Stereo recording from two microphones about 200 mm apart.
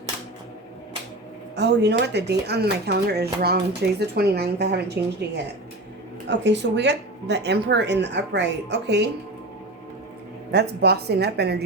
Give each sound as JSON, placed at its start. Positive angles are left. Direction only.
{"t": 1.5, "sound": "speech", "side_deg": -60}
{"t": 6.2, "sound": "speech", "side_deg": -60}
{"t": 10.5, "sound": "speech", "side_deg": -55}